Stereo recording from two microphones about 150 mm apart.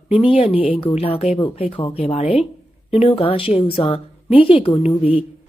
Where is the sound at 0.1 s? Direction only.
40° left (ahead or behind).